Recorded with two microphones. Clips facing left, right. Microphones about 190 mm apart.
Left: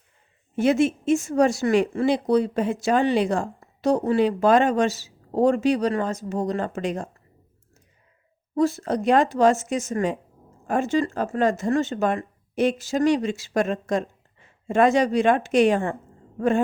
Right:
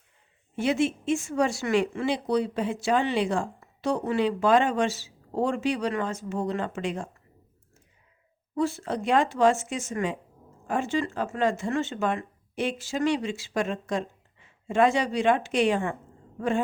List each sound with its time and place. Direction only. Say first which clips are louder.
0.5 s speech: left 5 dB; 45° left (ahead or behind)
8.5 s speech: left 5 dB; 40° left (ahead or behind)